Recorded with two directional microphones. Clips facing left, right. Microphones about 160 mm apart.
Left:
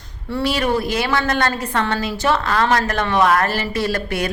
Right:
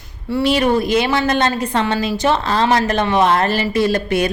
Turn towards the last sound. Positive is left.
turn(degrees=-20)  # may be behind; listen again after turning